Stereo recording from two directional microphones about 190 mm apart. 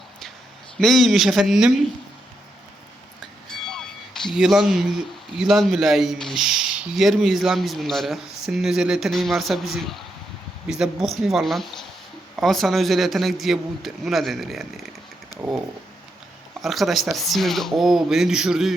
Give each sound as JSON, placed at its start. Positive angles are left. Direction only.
{"t": 0.8, "sound": "speech", "side_deg": 0}
{"t": 3.5, "sound": "music", "side_deg": 5}
{"t": 5.4, "sound": "speech", "side_deg": 0}
{"t": 15.3, "sound": "a sound", "side_deg": 20}
{"t": 16.6, "sound": "speech", "side_deg": 0}